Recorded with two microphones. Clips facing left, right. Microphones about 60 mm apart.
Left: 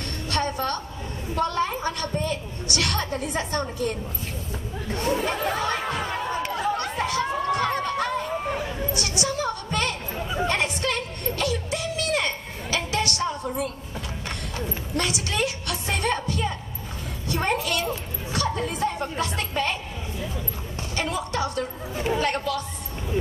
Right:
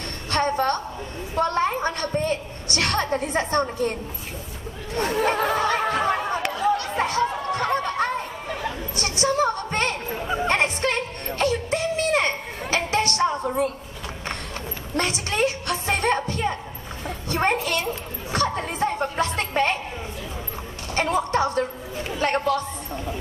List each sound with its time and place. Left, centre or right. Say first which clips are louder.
0.3 s a sound: right 4 dB; right
1.3 s a woman's voice: right 3 dB; right
5.0 s a sound: right 3 dB; right
10.2 s music: right 3 dB; right
15.0 s a woman's voice: right 3 dB; right
18.3 s music: right 2 dB; right
20.9 s music: right 6 dB; right
22.2 s a woman's voice: right 3 dB; right